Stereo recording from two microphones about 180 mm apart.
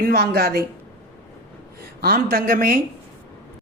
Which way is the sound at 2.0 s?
55° right (ahead or behind).